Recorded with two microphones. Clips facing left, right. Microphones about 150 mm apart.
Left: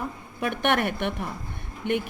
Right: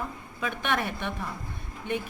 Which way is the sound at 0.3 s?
65° left (ahead or behind).